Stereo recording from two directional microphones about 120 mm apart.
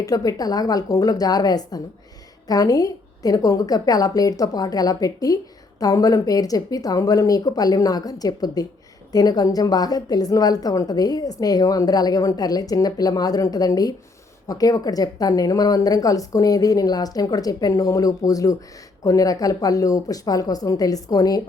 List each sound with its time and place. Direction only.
0.0 s speech: 30° left (ahead or behind)